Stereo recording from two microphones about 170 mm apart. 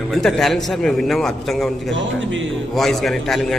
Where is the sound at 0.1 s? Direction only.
Centre (ahead or behind).